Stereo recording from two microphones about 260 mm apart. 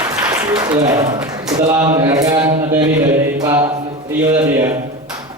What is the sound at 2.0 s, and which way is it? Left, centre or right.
Mantra, centre.